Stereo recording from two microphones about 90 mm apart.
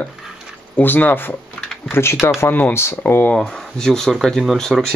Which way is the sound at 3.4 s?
10° left (ahead or behind).